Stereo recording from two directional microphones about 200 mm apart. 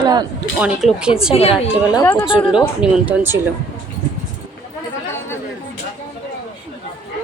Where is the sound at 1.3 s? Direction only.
30° left (ahead or behind).